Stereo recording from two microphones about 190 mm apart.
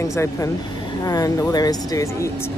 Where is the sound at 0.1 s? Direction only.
15° left (ahead or behind).